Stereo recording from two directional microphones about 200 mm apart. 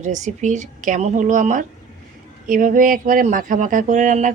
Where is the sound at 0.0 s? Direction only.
35° right (ahead or behind).